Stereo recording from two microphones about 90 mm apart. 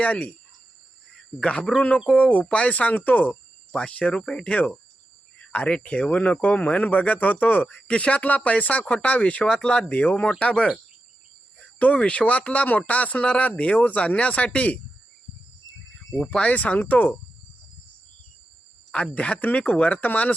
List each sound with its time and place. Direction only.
0.0 s speech: 15° left (ahead or behind)
1.4 s speech: 10° left (ahead or behind)
16.3 s speech: 15° left (ahead or behind)
19.1 s speech: 15° left (ahead or behind)